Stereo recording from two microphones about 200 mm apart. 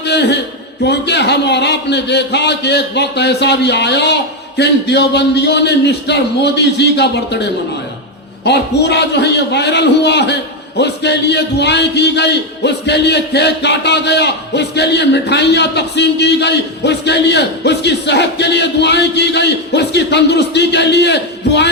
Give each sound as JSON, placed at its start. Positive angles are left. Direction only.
{"t": 0.0, "sound": "a sound", "side_deg": 60}
{"t": 0.9, "sound": "a man's voice", "side_deg": 60}
{"t": 8.4, "sound": "a man's voice", "side_deg": 55}